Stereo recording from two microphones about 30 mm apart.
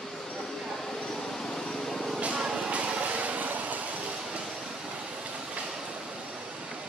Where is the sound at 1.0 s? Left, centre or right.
Centre.